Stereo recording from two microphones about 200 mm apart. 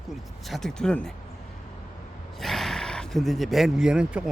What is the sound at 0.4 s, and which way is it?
Speech, centre (ahead or behind).